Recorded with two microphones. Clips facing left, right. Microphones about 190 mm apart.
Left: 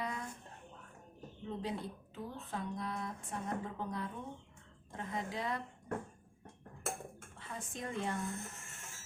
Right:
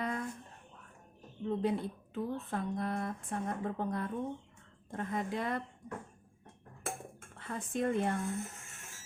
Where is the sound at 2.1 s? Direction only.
55° right (ahead or behind).